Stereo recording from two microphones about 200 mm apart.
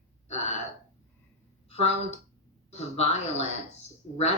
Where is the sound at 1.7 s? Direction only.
30° left (ahead or behind).